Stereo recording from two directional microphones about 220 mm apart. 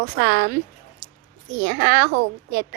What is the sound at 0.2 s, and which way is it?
Speech, 50° right (ahead or behind).